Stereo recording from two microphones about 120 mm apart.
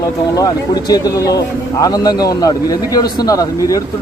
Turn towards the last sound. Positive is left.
turn(degrees=30)  # may be behind; listen again after turning